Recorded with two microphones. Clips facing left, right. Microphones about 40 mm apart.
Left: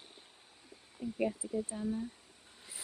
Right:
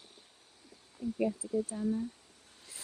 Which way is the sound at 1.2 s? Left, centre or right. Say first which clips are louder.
Right 2 dB; left.